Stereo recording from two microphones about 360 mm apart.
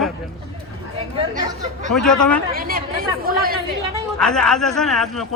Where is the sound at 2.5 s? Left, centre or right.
Right.